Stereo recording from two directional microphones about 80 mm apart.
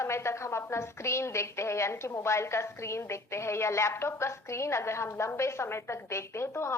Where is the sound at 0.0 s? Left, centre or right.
Left.